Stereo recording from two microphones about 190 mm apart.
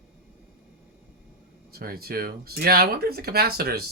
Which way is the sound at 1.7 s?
55° right (ahead or behind).